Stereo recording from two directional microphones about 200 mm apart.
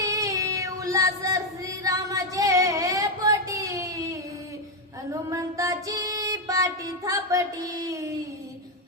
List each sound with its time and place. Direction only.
0.0 s child singing: 15° right (ahead or behind)
5.3 s music: 15° right (ahead or behind)